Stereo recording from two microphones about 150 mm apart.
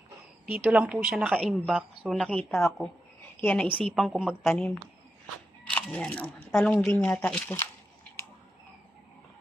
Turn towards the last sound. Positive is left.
turn(degrees=10)  # may be behind; listen again after turning